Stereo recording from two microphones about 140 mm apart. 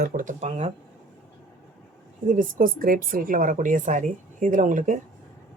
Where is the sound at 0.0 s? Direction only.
75° right (ahead or behind); by 0.7 s 55° right (ahead or behind).